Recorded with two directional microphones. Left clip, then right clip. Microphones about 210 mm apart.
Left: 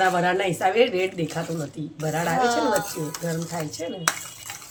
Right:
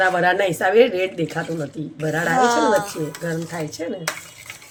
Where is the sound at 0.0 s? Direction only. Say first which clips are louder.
Right 4 dB; 25° right (ahead or behind).